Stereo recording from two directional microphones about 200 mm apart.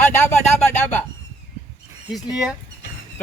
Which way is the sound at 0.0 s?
10° left (ahead or behind).